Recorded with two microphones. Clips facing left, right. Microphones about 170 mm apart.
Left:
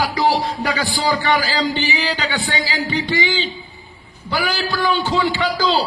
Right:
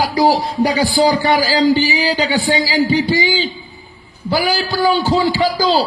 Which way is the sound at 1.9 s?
10° right (ahead or behind).